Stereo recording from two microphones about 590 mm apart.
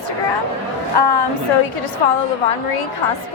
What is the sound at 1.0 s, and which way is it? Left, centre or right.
Speech, left.